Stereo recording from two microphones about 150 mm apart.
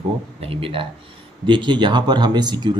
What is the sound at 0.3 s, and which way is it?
Speech, 40° right (ahead or behind).